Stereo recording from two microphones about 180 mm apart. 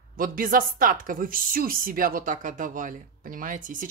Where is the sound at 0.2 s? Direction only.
50° right (ahead or behind).